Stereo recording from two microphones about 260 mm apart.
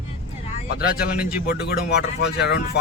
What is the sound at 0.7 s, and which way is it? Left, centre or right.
Speech, left.